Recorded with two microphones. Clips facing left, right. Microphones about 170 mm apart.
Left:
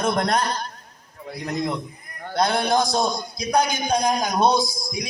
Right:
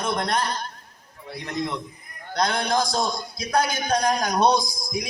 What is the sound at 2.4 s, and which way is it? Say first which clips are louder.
Speech: left 3 dB; 30° left (ahead or behind).